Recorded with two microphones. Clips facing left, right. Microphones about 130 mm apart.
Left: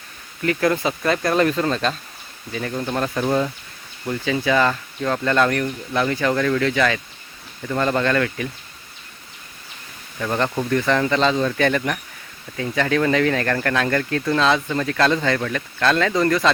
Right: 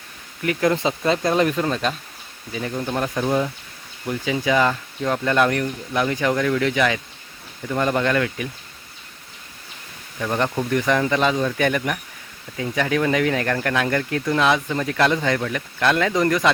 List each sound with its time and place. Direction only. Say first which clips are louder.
0.4 s speech: even; 20° right (ahead or behind)
10.2 s speech: even; 10° right (ahead or behind)